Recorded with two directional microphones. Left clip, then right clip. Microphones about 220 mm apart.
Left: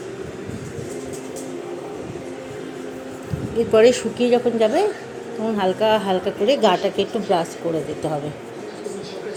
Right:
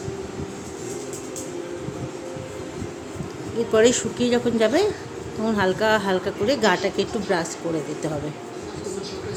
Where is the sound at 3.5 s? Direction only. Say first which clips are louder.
Left 4 dB; centre (ahead or behind).